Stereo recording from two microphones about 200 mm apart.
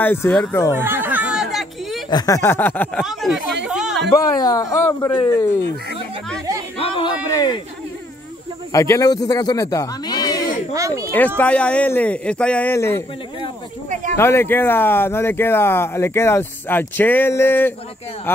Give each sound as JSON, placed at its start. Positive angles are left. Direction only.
{"t": 0.0, "sound": "speech", "side_deg": 10}
{"t": 0.7, "sound": "a sound", "side_deg": -10}
{"t": 2.0, "sound": "speech", "side_deg": 20}
{"t": 3.6, "sound": "a sound", "side_deg": 0}
{"t": 4.4, "sound": "speech", "side_deg": 20}
{"t": 6.8, "sound": "speech", "side_deg": 25}
{"t": 8.7, "sound": "speech", "side_deg": 15}
{"t": 10.7, "sound": "a sound", "side_deg": -15}
{"t": 11.1, "sound": "speech", "side_deg": 10}
{"t": 14.1, "sound": "speech", "side_deg": 10}